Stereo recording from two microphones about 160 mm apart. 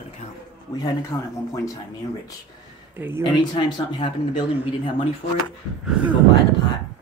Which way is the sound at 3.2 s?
30° left (ahead or behind).